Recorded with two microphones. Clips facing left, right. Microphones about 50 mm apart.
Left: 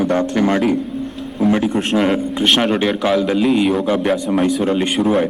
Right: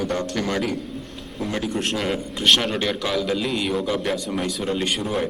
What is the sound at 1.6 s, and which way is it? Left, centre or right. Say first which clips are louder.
Speech: left 7 dB; centre.